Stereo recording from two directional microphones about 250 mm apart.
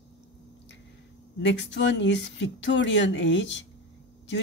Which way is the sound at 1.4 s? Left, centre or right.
Left.